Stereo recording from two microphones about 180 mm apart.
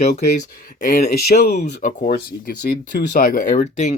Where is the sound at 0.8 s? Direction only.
60° left (ahead or behind).